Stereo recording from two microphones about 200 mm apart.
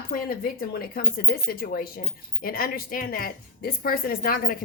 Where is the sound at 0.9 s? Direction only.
50° left (ahead or behind).